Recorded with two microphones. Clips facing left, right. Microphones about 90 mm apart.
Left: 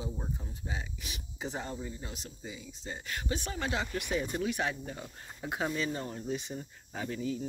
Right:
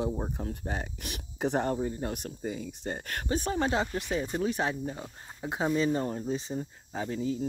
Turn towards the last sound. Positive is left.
turn(degrees=-30)  # may be behind; listen again after turning